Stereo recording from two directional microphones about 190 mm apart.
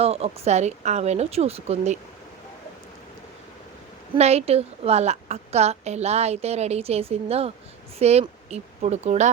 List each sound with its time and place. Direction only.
0.0 s a woman's voice: 30° right (ahead or behind)
4.1 s a woman's voice: 35° right (ahead or behind)